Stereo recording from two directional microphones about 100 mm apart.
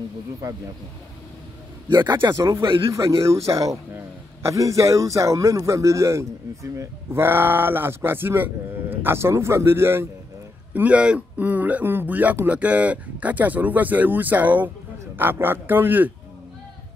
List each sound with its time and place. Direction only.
2.3 s a man's voice: 30° right (ahead or behind)
2.6 s speech: 60° right (ahead or behind)
2.9 s a man's voice: 30° right (ahead or behind)